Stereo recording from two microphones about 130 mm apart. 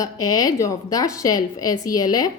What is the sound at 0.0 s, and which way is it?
A woman's voice, 25° left (ahead or behind).